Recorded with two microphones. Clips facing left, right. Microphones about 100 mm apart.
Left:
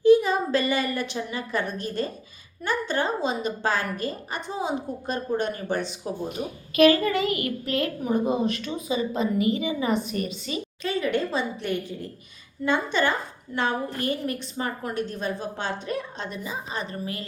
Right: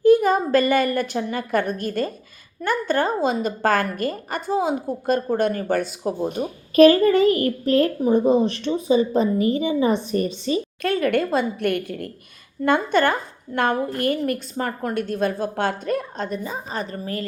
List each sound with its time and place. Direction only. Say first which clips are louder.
0.0 s a woman's voice: right 2 dB; 50° right (ahead or behind)
6.2 s a child's voice: right 6 dB; 40° right (ahead or behind)
10.8 s a woman's voice: right 4 dB; 55° right (ahead or behind)